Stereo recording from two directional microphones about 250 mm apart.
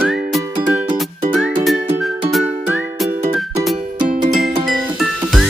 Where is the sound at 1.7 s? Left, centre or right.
Centre.